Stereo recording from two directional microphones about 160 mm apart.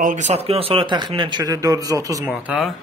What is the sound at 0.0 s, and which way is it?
Speech, 50° right (ahead or behind).